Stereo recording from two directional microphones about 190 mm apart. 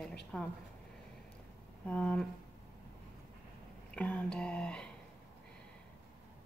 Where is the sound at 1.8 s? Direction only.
5° left (ahead or behind).